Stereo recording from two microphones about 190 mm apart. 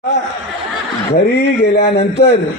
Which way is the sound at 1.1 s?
60° left (ahead or behind).